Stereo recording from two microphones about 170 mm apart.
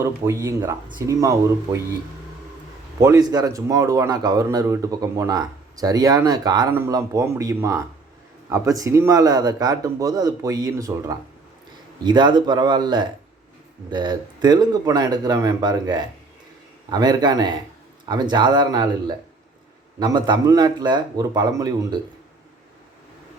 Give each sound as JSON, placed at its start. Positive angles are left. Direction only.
{"t": 0.0, "sound": "speech", "side_deg": -15}
{"t": 3.0, "sound": "a man's voice", "side_deg": -20}